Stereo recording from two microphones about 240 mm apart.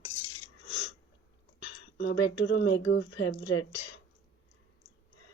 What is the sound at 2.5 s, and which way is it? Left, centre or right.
Speech, left.